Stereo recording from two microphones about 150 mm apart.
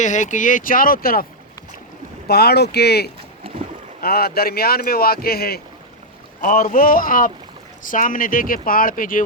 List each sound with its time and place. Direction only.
0.0 s speech: 55° left (ahead or behind); by 1.3 s 75° left (ahead or behind)
2.2 s speech: 90° left
6.4 s speech: 65° left (ahead or behind)